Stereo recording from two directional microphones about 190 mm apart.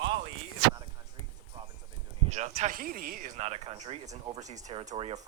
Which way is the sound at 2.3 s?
35° right (ahead or behind).